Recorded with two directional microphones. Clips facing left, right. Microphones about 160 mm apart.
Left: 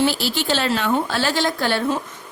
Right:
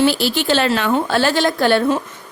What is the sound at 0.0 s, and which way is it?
A woman's voice, 70° right (ahead or behind).